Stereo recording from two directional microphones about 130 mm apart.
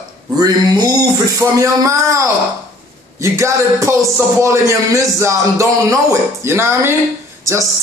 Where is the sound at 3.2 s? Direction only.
25° right (ahead or behind).